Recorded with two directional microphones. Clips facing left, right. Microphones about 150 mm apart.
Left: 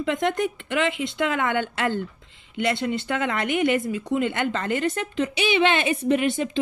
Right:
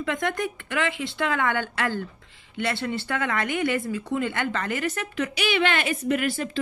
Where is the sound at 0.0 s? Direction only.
25° left (ahead or behind).